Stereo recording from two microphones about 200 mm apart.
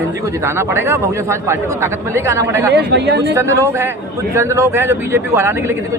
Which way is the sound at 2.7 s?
60° right (ahead or behind).